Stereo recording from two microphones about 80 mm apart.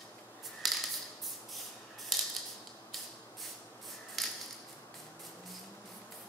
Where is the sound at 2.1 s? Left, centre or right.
Centre.